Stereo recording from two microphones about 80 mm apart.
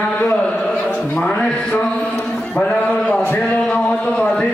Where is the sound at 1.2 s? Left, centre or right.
Centre.